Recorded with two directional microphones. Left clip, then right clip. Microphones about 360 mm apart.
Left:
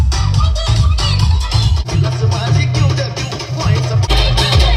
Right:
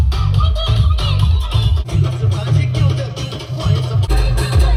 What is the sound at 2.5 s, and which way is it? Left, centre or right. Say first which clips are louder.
Music: left 4 dB; left.